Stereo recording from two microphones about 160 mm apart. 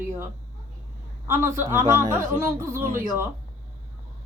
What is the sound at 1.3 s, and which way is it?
A woman's voice, 15° right (ahead or behind).